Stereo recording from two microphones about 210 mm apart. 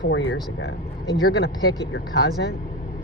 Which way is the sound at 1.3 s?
50° left (ahead or behind).